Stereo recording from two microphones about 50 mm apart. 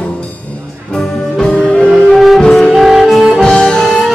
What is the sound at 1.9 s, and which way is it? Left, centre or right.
Music, centre.